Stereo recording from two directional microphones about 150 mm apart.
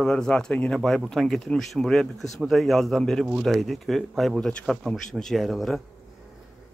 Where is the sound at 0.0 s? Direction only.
5° left (ahead or behind).